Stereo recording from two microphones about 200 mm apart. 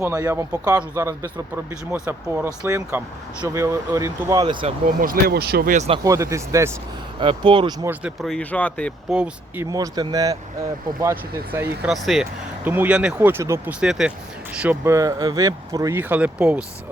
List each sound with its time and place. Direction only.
0.0 s speech: 15° right (ahead or behind)
4.9 s speech: 45° right (ahead or behind)
6.0 s speech: 15° right (ahead or behind)
7.9 s speech: 5° right (ahead or behind)
9.1 s speech: 5° right (ahead or behind)
9.6 s speech: 20° right (ahead or behind)